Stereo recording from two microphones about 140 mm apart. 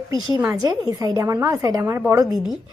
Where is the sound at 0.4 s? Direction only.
25° right (ahead or behind).